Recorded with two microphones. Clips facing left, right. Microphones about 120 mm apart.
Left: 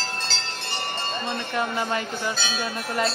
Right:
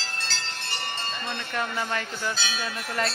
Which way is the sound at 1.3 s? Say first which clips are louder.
Left 3 dB; 10° left (ahead or behind).